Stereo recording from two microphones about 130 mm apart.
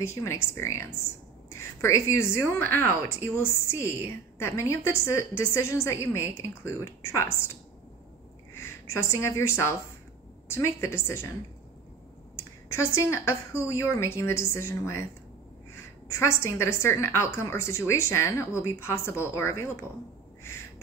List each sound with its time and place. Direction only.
0.0 s a woman's voice: 20° left (ahead or behind)
8.5 s a woman's voice: 20° left (ahead or behind)
12.7 s a woman's voice: 20° left (ahead or behind)